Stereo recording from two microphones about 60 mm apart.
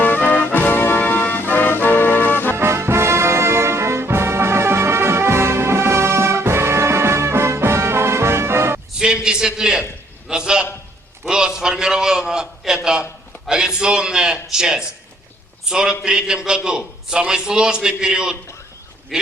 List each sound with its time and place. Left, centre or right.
0.0 s music: left
2.6 s music: right
9.0 s a man's voice: centre